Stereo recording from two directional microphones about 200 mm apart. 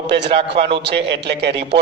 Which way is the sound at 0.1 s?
60° right (ahead or behind).